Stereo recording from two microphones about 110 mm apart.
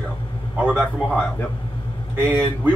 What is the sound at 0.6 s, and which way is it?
Speech, 15° right (ahead or behind).